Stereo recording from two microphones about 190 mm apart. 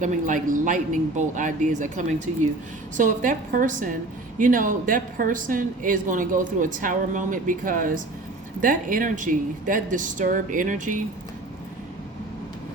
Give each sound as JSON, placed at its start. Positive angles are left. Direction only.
{"t": 0.0, "sound": "a woman's voice", "side_deg": -45}